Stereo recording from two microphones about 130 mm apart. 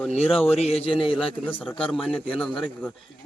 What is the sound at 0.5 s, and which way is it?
Speech, 55° left (ahead or behind).